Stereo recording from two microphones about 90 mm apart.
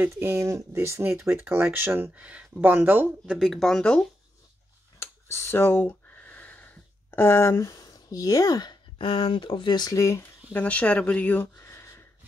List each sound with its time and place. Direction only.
0.1 s speech: 30° right (ahead or behind)
3.3 s speech: centre (ahead or behind)
4.9 s a sound: 30° left (ahead or behind)
8.9 s speech: 75° left (ahead or behind); by 10.2 s 40° left (ahead or behind)
10.5 s speech: 15° left (ahead or behind)
11.5 s a sound: 30° left (ahead or behind)